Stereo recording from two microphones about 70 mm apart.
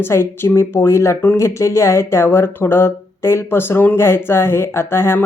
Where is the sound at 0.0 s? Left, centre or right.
Left.